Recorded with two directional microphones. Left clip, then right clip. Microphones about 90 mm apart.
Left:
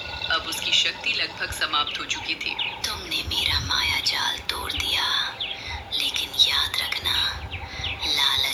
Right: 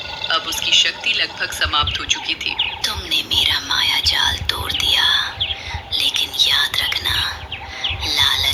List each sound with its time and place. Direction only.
0.2 s a woman's voice: 25° right (ahead or behind)
5.9 s whispering: 25° right (ahead or behind)
7.8 s bird: 25° right (ahead or behind)